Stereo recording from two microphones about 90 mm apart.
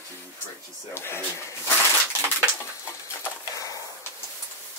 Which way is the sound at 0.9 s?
25° left (ahead or behind).